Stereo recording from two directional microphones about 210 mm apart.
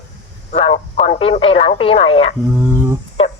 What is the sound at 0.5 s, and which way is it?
Speech, 30° left (ahead or behind).